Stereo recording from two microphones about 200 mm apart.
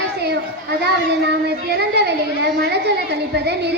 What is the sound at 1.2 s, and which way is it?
A child's voice, 55° right (ahead or behind).